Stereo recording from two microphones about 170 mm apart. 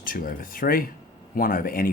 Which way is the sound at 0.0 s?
55° left (ahead or behind).